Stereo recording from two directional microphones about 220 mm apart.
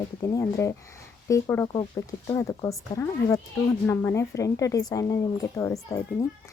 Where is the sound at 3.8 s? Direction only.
10° left (ahead or behind).